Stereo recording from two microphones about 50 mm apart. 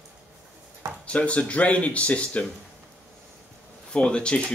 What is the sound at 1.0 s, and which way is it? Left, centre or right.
Speech, left.